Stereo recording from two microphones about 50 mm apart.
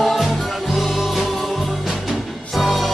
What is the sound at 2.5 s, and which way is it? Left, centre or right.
Music, centre.